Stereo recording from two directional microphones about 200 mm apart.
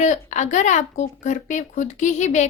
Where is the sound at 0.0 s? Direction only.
35° left (ahead or behind).